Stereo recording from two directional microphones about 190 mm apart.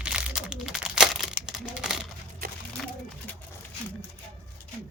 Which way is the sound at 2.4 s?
50° right (ahead or behind).